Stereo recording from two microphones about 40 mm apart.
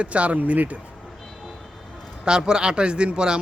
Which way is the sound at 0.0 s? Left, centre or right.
Right.